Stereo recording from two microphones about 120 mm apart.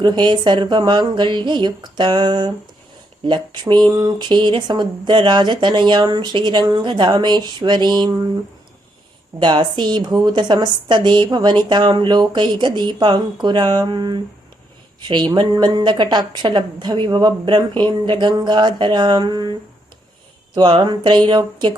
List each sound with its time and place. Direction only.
0.0 s speech: 40° right (ahead or behind)
9.4 s speech: 40° right (ahead or behind)
20.6 s speech: 40° right (ahead or behind)